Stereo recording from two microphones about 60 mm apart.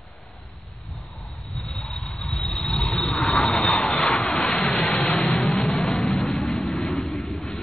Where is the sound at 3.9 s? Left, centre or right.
Centre.